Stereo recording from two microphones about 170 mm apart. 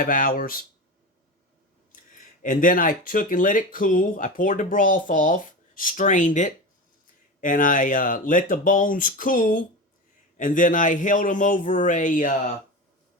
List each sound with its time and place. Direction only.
0.0 s speech: 55° left (ahead or behind)
1.9 s speech: 50° left (ahead or behind)